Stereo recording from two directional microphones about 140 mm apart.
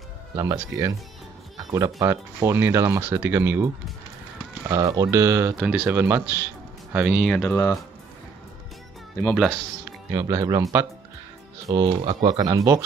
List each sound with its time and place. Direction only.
0.4 s speech: 25° right (ahead or behind)
5.6 s speech: 5° right (ahead or behind)
7.4 s speech: 20° left (ahead or behind)
9.2 s speech: 5° left (ahead or behind)
10.1 s speech: 25° right (ahead or behind)
11.7 s speech: 35° right (ahead or behind)
12.3 s speech: 30° right (ahead or behind)